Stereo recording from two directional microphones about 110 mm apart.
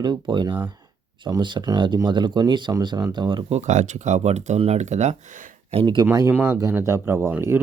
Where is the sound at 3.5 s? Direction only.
90° right.